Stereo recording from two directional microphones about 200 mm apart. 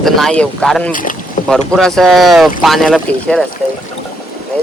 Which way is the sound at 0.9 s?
40° left (ahead or behind).